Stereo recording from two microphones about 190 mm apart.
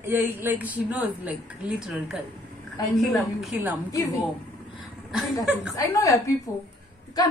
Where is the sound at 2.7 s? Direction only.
20° left (ahead or behind).